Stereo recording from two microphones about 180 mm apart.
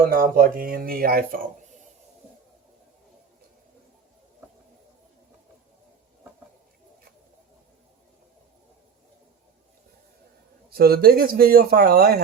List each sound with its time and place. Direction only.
0.1 s speech: 50° right (ahead or behind)
10.7 s speech: 60° right (ahead or behind)